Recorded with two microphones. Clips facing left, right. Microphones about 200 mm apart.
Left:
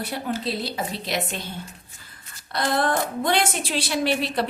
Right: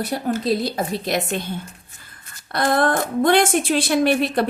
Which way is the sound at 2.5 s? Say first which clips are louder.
Right 4 dB; 50° right (ahead or behind).